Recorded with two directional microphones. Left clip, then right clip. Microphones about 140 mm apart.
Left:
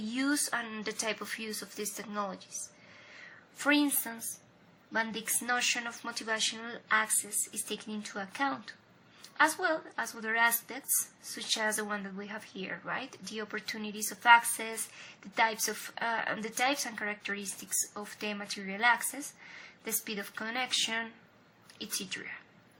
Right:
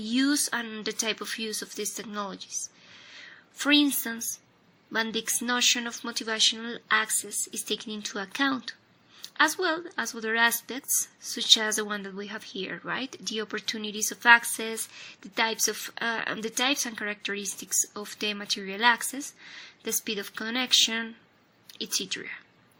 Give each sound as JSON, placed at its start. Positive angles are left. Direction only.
{"t": 0.1, "sound": "speech", "side_deg": -30}
{"t": 3.6, "sound": "a woman's voice", "side_deg": -35}